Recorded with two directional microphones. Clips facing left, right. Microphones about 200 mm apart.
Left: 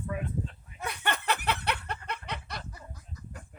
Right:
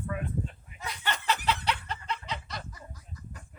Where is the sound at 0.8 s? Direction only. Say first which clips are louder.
Left 2 dB; 60° left (ahead or behind).